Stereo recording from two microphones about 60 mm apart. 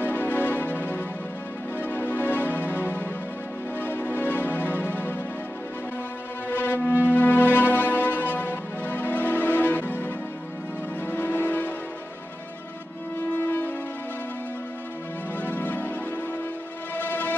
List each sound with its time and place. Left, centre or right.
0.0 s music: left
6.5 s music: left
13.4 s music: left
15.4 s music: left
16.9 s music: left